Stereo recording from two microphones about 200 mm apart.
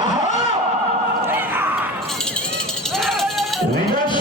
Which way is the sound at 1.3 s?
10° right (ahead or behind).